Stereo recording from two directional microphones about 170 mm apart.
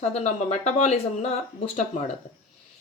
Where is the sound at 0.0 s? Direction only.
40° left (ahead or behind).